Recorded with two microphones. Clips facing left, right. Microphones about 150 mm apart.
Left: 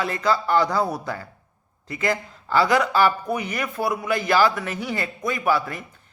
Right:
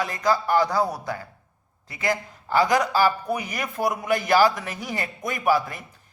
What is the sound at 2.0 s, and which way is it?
A man's voice, 15° right (ahead or behind).